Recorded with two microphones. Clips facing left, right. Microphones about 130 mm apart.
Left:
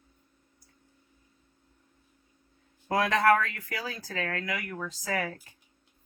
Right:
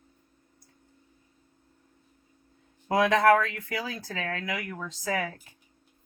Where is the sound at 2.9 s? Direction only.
20° right (ahead or behind).